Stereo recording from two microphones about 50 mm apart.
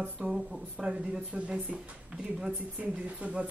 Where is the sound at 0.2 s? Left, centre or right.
Centre.